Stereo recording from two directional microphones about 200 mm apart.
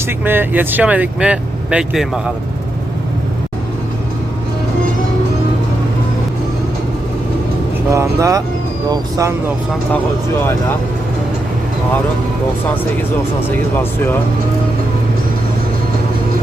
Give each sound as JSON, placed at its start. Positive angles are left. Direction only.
{"t": 0.3, "sound": "speech", "side_deg": -10}
{"t": 7.9, "sound": "speech", "side_deg": -15}